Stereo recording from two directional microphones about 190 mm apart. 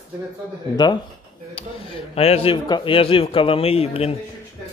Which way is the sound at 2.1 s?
30° left (ahead or behind).